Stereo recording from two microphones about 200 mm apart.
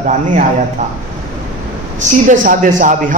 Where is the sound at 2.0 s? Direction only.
40° right (ahead or behind).